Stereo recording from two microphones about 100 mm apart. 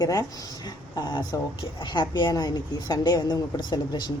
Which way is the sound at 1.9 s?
50° left (ahead or behind).